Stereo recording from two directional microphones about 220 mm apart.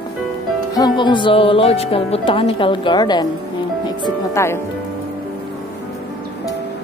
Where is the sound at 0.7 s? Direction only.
20° left (ahead or behind).